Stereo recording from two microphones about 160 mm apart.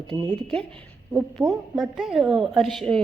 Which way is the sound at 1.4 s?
15° right (ahead or behind).